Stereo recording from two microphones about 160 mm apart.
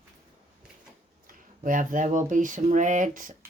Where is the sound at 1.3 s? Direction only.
55° right (ahead or behind).